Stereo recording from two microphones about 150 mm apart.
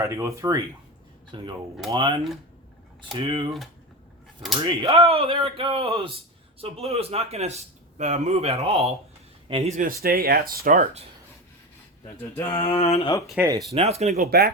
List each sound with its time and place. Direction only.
0.0 s speech: 20° right (ahead or behind)
1.3 s speech: 35° right (ahead or behind)
4.8 s a man's voice: 40° right (ahead or behind)
10.0 s speech: 90° right
12.4 s a sound: 20° left (ahead or behind)
12.6 s speech: 40° left (ahead or behind)
13.4 s speech: 10° right (ahead or behind)
13.7 s a man's voice: 45° right (ahead or behind)
14.2 s speech: 90° right